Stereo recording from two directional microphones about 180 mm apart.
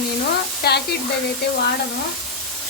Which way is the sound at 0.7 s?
60° left (ahead or behind).